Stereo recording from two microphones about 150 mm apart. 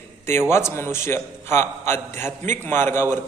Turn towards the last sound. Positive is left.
turn(degrees=15)  # may be behind; listen again after turning